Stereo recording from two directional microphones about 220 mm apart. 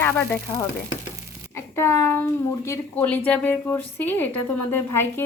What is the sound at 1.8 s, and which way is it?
Frying, 10° left (ahead or behind).